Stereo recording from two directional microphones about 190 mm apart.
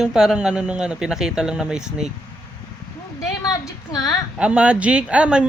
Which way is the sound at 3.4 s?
20° left (ahead or behind).